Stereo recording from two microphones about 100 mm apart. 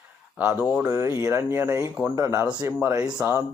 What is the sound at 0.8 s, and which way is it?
Speech, 25° right (ahead or behind).